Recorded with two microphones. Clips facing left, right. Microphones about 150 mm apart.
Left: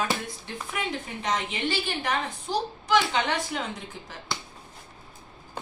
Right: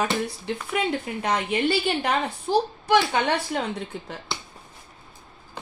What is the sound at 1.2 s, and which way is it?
A woman's voice, 60° right (ahead or behind).